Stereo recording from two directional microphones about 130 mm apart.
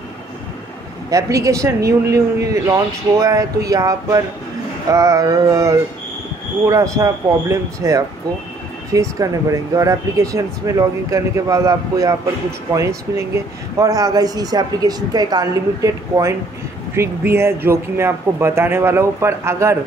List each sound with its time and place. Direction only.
1.1 s speech: 25° right (ahead or behind)